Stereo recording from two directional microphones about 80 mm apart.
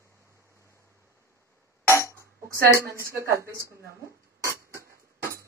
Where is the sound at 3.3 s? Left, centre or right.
Right.